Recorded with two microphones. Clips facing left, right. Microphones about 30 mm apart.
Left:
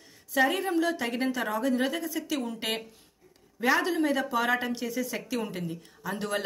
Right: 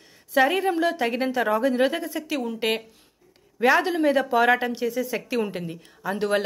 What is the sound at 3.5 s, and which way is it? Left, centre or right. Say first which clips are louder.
A woman's voice: right 5 dB; right.